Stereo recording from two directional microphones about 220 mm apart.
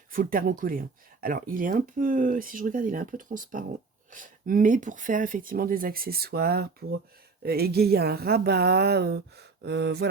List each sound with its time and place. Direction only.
0.1 s speech: 40° right (ahead or behind)